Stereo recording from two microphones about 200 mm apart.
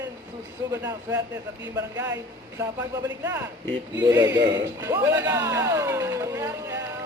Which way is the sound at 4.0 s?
20° right (ahead or behind).